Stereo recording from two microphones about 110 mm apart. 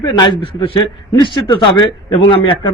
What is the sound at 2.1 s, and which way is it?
Speech, 55° left (ahead or behind).